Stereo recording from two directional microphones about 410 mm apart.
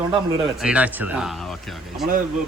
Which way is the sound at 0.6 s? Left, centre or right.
Centre.